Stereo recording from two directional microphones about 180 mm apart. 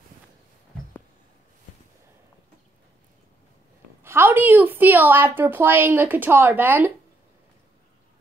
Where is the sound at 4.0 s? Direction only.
15° right (ahead or behind).